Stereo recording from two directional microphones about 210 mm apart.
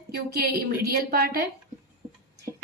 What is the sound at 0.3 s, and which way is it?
A woman's voice, 45° right (ahead or behind).